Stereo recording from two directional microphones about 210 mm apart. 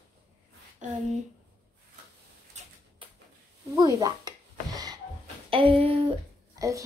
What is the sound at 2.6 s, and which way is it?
Typewriter, 35° right (ahead or behind).